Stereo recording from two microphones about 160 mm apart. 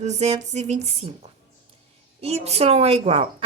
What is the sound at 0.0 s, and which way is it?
Music, 45° right (ahead or behind).